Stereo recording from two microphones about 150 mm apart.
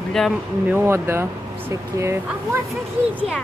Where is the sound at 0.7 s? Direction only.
15° right (ahead or behind).